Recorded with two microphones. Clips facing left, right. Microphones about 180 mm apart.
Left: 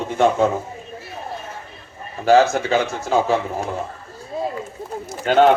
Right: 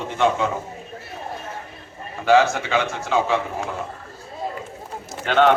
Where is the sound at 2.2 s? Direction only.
40° left (ahead or behind).